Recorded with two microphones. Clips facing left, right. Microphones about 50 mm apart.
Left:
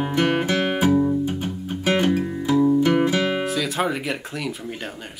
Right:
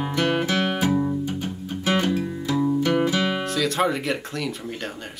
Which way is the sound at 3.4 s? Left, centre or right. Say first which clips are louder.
Right 1 dB; centre.